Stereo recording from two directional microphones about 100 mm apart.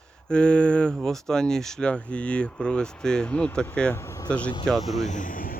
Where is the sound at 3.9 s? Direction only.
30° left (ahead or behind).